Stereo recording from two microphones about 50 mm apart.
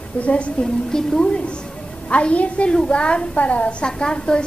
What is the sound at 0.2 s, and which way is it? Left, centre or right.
A woman's voice, left.